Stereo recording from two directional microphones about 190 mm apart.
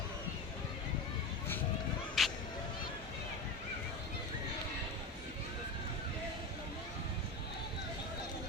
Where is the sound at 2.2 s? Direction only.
Centre (ahead or behind).